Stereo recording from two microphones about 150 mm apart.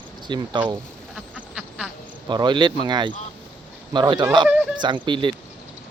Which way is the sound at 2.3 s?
30° right (ahead or behind).